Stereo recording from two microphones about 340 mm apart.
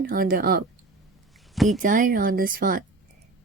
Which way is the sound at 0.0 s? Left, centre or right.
Right.